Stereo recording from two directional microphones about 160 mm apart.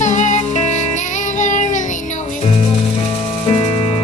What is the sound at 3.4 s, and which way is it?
Music, 25° left (ahead or behind).